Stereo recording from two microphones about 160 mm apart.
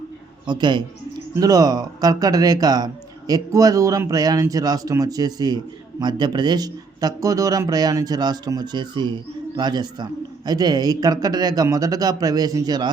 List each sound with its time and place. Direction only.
0.4 s speech: 30° right (ahead or behind)